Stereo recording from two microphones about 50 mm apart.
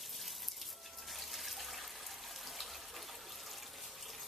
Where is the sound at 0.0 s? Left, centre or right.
Centre.